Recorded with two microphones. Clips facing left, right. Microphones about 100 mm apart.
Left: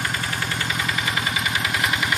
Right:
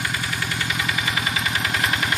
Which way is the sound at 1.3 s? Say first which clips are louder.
Even; 15° left (ahead or behind).